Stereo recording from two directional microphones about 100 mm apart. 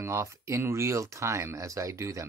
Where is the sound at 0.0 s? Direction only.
30° right (ahead or behind).